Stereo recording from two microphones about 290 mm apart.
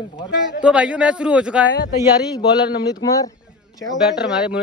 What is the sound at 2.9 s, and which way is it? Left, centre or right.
Speech, centre.